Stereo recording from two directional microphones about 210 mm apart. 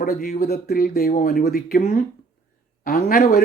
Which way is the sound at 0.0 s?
45° left (ahead or behind).